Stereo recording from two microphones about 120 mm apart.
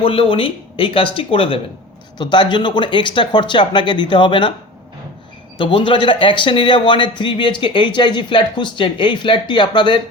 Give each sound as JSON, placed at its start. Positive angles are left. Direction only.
{"t": 0.0, "sound": "speech", "side_deg": 50}
{"t": 5.5, "sound": "speech", "side_deg": 45}